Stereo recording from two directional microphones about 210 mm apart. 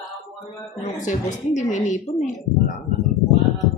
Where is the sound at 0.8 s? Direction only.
35° left (ahead or behind).